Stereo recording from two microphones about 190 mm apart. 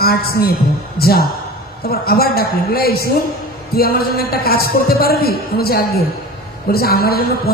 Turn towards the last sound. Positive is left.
turn(degrees=50)  # may be behind; listen again after turning